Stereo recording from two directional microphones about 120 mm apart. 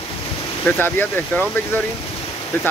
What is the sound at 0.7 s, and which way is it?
Speech, 15° left (ahead or behind).